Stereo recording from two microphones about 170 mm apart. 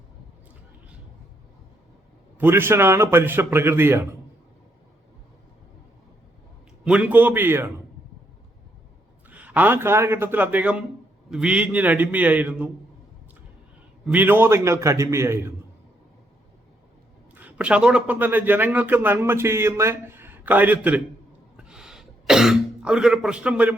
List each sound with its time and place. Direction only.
2.4 s a man's voice: 10° right (ahead or behind)
6.8 s a man's voice: 5° right (ahead or behind)
9.3 s a man's voice: 10° right (ahead or behind)
14.0 s a man's voice: 10° right (ahead or behind)
17.3 s a man's voice: 10° right (ahead or behind)
21.6 s throat clearing: 5° right (ahead or behind)